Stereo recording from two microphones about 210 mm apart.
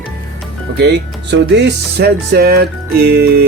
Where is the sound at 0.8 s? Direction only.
55° right (ahead or behind).